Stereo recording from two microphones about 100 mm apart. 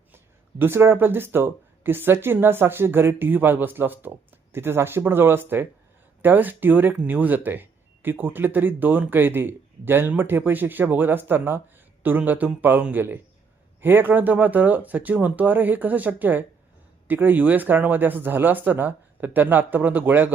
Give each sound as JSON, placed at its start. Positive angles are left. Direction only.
{"t": 0.6, "sound": "speech", "side_deg": -25}